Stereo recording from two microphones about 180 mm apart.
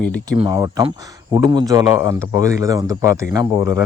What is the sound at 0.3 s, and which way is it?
A man's voice, 20° right (ahead or behind).